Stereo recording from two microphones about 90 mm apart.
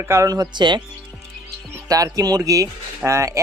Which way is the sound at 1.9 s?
40° right (ahead or behind).